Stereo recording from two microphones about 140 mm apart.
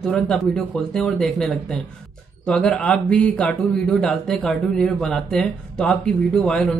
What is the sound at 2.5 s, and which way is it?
A man's voice, 5° left (ahead or behind).